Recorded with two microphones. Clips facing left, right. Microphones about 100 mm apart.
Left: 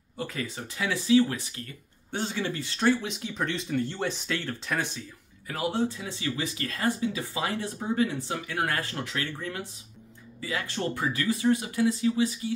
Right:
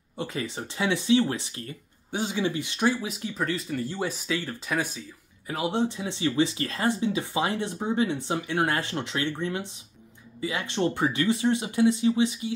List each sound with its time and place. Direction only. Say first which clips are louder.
0.2 s speech: right 2 dB; 25° right (ahead or behind)
2.0 s speech: right 3 dB; 10° right (ahead or behind)
2.9 s speech: left 2 dB; 5° right (ahead or behind)
5.5 s speech: right 2 dB; 20° right (ahead or behind)